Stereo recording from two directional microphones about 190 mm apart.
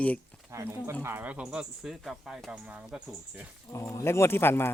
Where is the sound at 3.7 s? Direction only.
15° left (ahead or behind).